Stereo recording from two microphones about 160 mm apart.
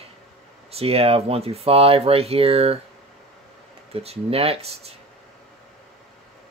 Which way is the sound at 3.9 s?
40° right (ahead or behind).